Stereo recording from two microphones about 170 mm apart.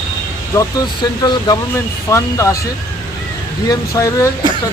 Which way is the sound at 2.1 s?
15° left (ahead or behind).